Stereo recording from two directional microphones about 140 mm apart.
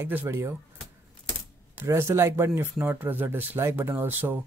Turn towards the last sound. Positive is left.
turn(degrees=-15)  # may be behind; listen again after turning